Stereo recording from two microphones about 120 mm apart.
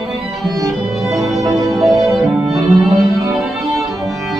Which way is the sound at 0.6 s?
30° right (ahead or behind).